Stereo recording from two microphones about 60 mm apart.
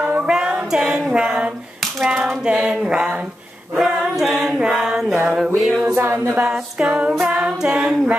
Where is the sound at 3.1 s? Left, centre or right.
Right.